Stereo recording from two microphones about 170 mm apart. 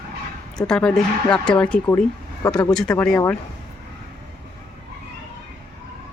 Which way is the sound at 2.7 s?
5° left (ahead or behind).